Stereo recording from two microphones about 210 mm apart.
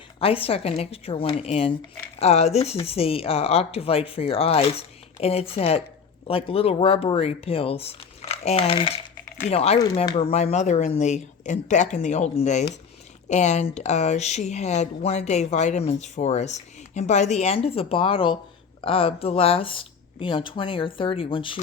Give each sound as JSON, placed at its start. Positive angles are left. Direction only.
{"t": 0.2, "sound": "speech", "side_deg": 25}